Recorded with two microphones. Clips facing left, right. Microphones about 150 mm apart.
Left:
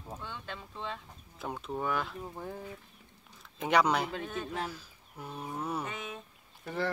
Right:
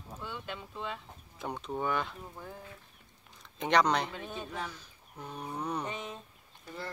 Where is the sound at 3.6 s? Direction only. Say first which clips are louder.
Even; 5° left (ahead or behind).